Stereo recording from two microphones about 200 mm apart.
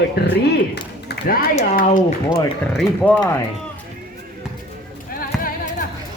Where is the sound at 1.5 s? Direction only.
40° left (ahead or behind).